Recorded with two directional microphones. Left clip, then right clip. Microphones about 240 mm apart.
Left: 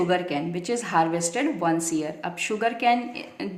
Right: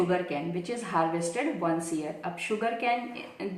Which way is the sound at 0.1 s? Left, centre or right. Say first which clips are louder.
Left 4 dB; left.